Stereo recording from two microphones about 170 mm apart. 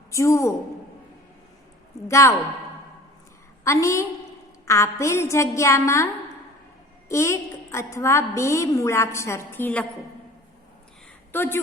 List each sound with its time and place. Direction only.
0.1 s a woman's voice: 20° left (ahead or behind)
2.0 s a woman's voice: 15° left (ahead or behind)
3.6 s a woman's voice: 15° left (ahead or behind)
7.1 s a woman's voice: 15° left (ahead or behind)
11.3 s a woman's voice: 10° left (ahead or behind)